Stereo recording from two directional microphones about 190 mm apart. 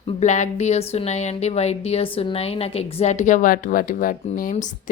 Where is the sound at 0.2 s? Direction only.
40° left (ahead or behind).